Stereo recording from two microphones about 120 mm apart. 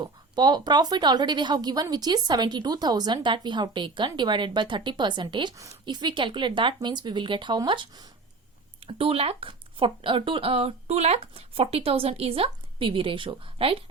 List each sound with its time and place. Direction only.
0.0 s a woman's voice: 35° right (ahead or behind)
8.9 s speech: 50° right (ahead or behind)